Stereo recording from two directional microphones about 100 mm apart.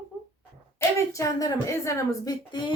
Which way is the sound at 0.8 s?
30° left (ahead or behind).